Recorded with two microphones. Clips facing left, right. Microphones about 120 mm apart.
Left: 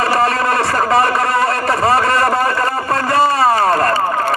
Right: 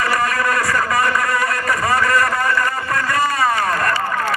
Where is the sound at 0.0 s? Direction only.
30° left (ahead or behind).